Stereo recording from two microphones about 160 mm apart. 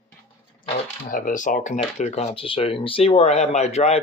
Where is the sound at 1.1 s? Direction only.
55° left (ahead or behind).